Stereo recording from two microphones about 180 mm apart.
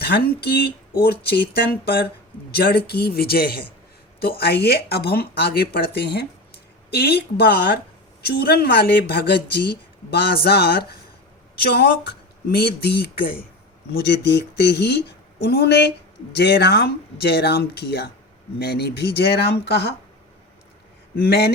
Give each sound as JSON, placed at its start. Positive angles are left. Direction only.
{"t": 0.0, "sound": "speech", "side_deg": 60}
{"t": 21.2, "sound": "speech", "side_deg": 65}